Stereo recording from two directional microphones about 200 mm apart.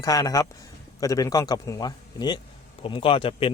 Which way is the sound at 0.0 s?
15° left (ahead or behind).